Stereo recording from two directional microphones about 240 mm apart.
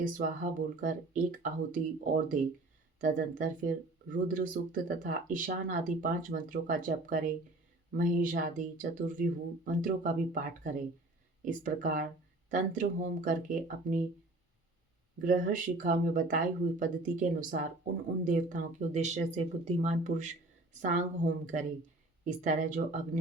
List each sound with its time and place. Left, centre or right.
0.0 s speech: right
15.2 s speech: right